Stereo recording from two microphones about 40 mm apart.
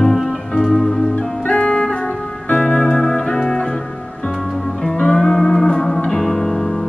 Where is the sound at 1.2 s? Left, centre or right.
Left.